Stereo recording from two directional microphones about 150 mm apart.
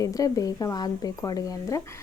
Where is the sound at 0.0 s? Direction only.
20° left (ahead or behind).